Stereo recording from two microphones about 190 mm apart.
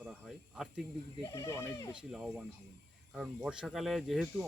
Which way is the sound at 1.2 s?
15° left (ahead or behind).